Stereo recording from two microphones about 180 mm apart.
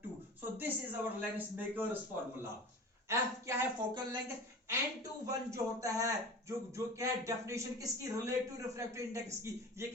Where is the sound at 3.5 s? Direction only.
15° right (ahead or behind).